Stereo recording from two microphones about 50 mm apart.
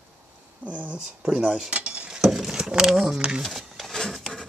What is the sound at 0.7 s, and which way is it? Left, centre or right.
Speech, right.